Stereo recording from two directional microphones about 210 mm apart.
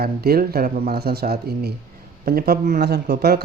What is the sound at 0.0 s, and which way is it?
Speech, 45° right (ahead or behind).